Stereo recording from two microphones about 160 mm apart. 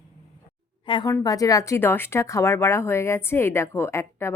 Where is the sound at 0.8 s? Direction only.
30° left (ahead or behind).